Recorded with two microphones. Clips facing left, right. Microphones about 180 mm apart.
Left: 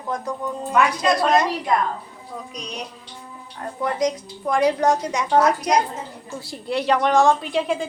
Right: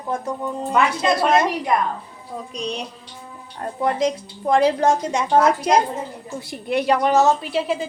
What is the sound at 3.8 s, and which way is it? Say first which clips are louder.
A woman's voice: right 2 dB; 25° right (ahead or behind).